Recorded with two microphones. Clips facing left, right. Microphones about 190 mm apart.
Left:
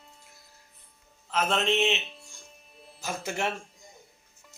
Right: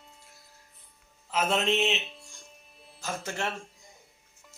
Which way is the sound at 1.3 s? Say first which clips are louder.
Even; 5° right (ahead or behind).